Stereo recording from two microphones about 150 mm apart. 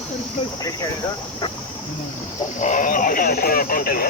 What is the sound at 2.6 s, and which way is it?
Speech, 55° left (ahead or behind).